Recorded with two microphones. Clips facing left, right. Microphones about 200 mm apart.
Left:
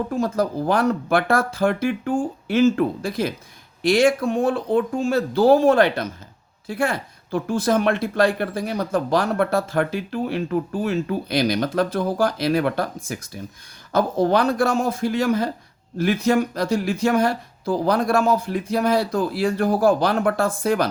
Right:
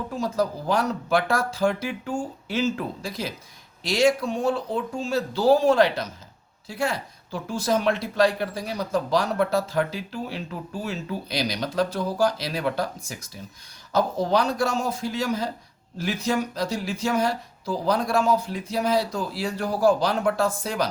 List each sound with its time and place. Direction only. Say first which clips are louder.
0.1 s speech: left 4 dB; 55° left (ahead or behind)